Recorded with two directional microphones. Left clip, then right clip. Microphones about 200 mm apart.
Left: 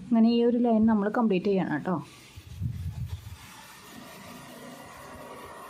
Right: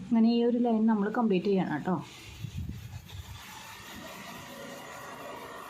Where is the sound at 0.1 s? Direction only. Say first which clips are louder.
Left 3 dB; 20° left (ahead or behind).